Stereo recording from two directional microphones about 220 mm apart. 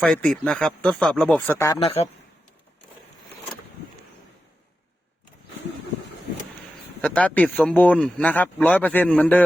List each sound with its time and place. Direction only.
0.0 s speech: 5° left (ahead or behind)
7.0 s speech: 5° left (ahead or behind)